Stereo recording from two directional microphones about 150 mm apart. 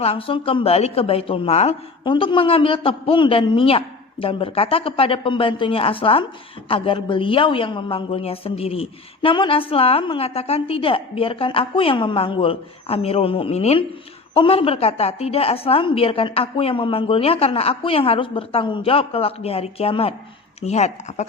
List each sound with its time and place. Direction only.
0.0 s a woman's voice: 40° left (ahead or behind)